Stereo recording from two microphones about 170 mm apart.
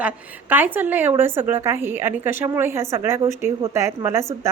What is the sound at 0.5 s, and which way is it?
A woman's voice, 10° right (ahead or behind).